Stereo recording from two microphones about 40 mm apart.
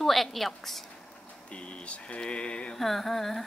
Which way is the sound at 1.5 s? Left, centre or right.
Left.